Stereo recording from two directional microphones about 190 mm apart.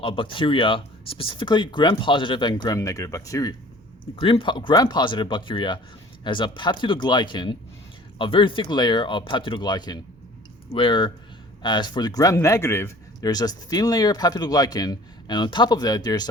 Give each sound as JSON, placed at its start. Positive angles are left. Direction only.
{"t": 0.0, "sound": "speech", "side_deg": 25}
{"t": 4.0, "sound": "speech", "side_deg": 30}